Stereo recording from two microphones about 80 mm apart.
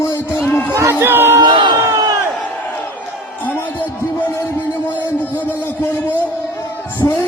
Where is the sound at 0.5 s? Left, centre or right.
Left.